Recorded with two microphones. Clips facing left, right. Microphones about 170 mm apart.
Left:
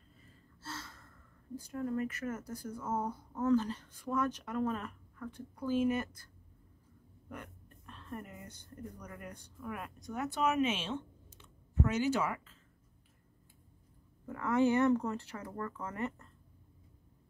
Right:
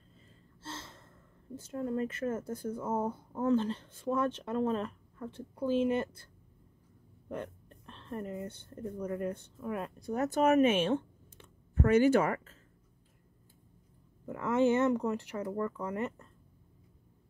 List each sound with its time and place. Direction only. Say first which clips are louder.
0.6 s speech: right 1 dB; 25° right (ahead or behind)
7.2 s speech: right 8 dB; 30° right (ahead or behind); by 12.5 s 50° right (ahead or behind)
14.2 s speech: right 2 dB; 20° right (ahead or behind)